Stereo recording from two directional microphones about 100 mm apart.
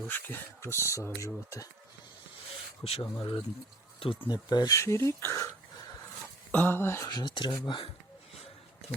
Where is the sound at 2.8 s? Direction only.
75° left (ahead or behind).